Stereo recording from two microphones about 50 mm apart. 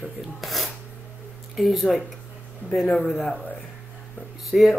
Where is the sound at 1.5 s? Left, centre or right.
Centre.